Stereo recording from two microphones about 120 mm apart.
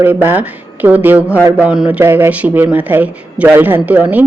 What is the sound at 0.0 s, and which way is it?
Speech, 15° right (ahead or behind).